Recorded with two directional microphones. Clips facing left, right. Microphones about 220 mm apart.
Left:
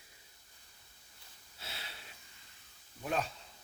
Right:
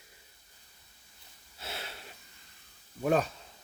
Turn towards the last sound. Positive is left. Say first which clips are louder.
# right 9 dB
turn(degrees=-50)  # may be behind; listen again after turning